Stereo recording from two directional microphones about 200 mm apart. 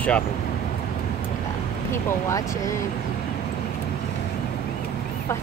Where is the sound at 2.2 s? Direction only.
15° left (ahead or behind).